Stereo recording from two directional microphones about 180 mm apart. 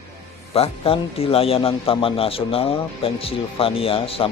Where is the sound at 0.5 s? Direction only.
30° left (ahead or behind).